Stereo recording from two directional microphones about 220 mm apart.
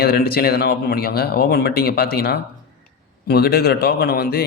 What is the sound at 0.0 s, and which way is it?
Speech, 45° left (ahead or behind).